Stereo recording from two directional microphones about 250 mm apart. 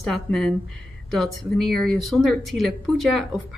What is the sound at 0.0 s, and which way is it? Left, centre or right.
Speech, centre.